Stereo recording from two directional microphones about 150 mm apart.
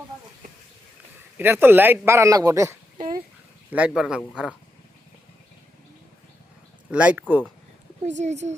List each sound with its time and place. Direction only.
1.4 s speech: 15° right (ahead or behind)
3.7 s speech: 10° right (ahead or behind)
6.9 s speech: 10° right (ahead or behind)
8.0 s speech: 50° right (ahead or behind)